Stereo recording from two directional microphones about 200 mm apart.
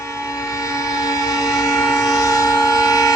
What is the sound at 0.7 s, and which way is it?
Train, 15° left (ahead or behind).